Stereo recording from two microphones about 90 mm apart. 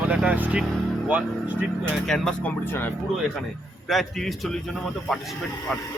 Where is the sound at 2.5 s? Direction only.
20° left (ahead or behind).